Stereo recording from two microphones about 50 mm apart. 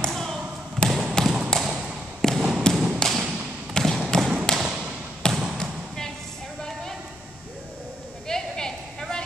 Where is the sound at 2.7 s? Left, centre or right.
Centre.